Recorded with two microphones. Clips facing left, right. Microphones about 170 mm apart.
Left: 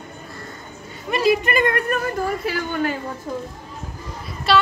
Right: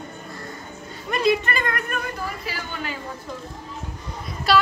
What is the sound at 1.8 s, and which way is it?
Speech, 40° left (ahead or behind).